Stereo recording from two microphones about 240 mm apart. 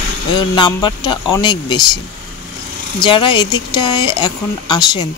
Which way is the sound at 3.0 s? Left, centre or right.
Left.